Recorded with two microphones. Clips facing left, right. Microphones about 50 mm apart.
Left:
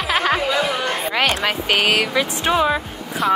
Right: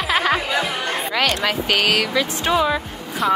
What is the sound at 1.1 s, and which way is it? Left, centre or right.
Speech, centre.